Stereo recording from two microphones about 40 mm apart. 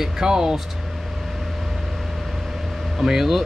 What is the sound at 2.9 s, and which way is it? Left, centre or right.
Speech, centre.